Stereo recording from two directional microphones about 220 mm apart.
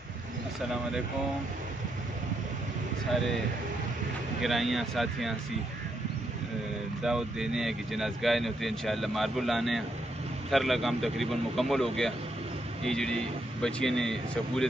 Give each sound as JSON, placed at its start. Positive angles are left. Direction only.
{"t": 4.4, "sound": "speech", "side_deg": 0}
{"t": 7.0, "sound": "speech", "side_deg": 0}